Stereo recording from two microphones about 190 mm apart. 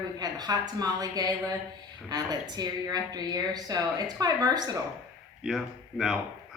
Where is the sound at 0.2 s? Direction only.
20° right (ahead or behind).